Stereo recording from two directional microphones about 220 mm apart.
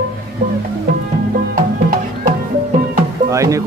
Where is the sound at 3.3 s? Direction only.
15° right (ahead or behind).